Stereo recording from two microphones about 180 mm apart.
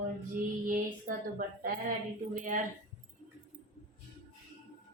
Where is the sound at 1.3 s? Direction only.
50° right (ahead or behind).